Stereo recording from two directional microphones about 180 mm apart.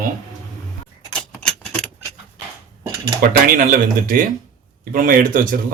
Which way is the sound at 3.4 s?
50° right (ahead or behind).